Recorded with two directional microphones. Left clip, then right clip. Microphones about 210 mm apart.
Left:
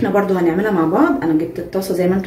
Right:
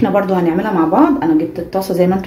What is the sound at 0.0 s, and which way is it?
Speech, 35° right (ahead or behind).